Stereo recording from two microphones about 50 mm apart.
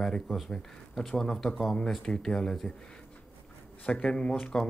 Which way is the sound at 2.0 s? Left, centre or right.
Centre.